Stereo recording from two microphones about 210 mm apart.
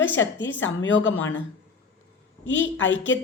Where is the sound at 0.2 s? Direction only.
60° left (ahead or behind).